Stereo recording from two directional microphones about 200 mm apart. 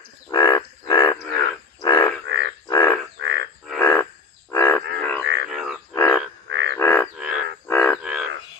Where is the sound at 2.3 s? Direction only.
60° right (ahead or behind).